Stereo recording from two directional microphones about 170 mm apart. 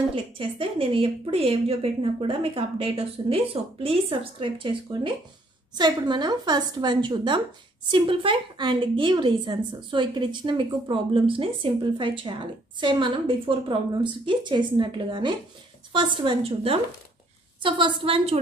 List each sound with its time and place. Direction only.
0.1 s a woman's voice: 30° right (ahead or behind)